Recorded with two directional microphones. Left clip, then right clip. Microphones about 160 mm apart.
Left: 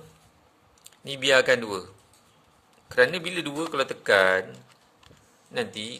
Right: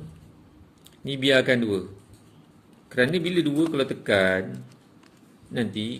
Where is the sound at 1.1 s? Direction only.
45° left (ahead or behind).